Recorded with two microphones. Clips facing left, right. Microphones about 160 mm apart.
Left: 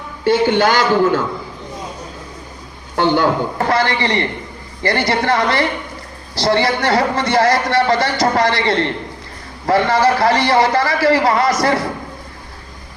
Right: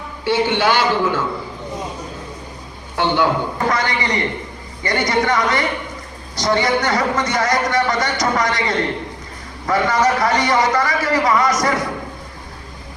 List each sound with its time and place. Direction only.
0.3 s a man's voice: 45° left (ahead or behind)
2.9 s a man's voice: 45° left (ahead or behind)
3.7 s a man's voice: 30° left (ahead or behind)